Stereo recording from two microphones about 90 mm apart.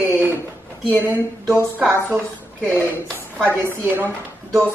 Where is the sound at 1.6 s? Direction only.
25° right (ahead or behind).